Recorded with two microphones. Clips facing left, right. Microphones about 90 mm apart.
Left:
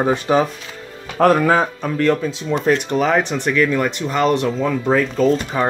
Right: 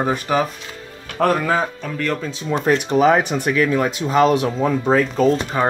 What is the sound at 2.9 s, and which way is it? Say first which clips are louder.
Speech: right 2 dB; 10° right (ahead or behind).